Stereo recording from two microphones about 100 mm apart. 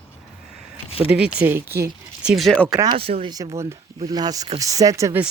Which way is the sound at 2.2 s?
5° right (ahead or behind).